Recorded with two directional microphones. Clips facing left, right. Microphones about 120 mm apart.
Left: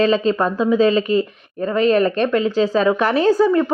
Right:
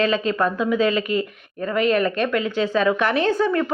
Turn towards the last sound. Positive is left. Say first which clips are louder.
# left 5 dB
turn(degrees=35)  # may be behind; listen again after turning